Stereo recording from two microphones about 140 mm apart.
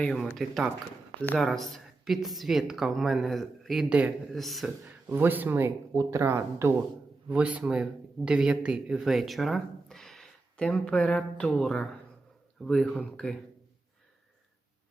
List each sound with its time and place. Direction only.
0.2 s a woman's voice: centre (ahead or behind)
5.0 s a woman's voice: 15° right (ahead or behind); by 13.3 s 5° left (ahead or behind)